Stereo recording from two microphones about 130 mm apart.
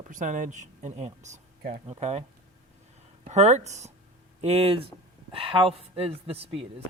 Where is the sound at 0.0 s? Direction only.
75° right (ahead or behind); by 2.2 s 55° right (ahead or behind).